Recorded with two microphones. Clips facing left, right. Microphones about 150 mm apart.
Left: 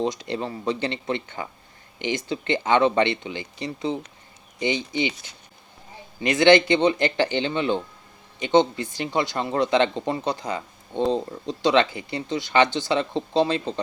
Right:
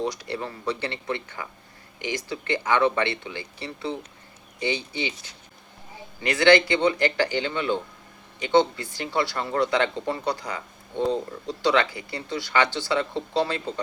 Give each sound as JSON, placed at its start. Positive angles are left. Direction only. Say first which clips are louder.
{"t": 0.0, "sound": "speech", "louder": "left 3 dB", "side_deg": 20}